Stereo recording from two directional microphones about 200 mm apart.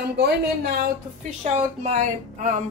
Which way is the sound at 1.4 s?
30° right (ahead or behind).